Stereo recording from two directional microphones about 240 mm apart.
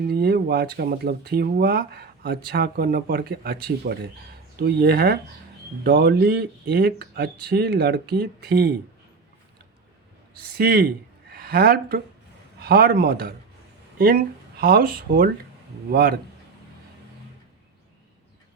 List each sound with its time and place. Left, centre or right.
0.1 s speech: right
10.6 s speech: right